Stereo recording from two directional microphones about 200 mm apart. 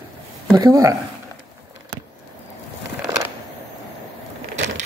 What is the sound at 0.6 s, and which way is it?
Speech, 15° right (ahead or behind).